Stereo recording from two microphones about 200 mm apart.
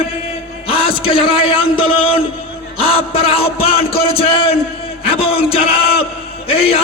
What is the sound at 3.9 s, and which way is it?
A man's voice, 30° left (ahead or behind).